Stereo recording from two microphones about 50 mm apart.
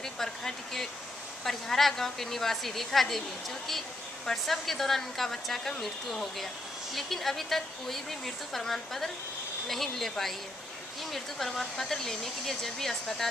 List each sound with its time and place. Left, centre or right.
0.0 s speech: centre
4.3 s speech: centre